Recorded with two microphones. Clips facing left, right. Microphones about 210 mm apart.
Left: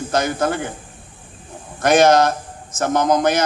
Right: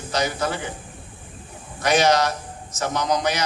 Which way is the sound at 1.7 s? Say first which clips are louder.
Left 6 dB; 50° left (ahead or behind).